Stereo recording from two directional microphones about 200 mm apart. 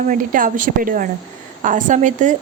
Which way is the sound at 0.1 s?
40° right (ahead or behind).